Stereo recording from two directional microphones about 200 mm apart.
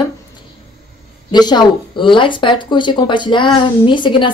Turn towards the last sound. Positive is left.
turn(degrees=25)  # may be behind; listen again after turning